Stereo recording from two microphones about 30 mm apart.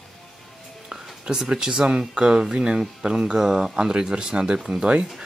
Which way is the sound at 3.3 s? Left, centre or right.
Right.